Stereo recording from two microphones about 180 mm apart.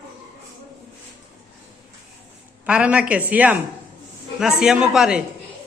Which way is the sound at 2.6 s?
5° right (ahead or behind).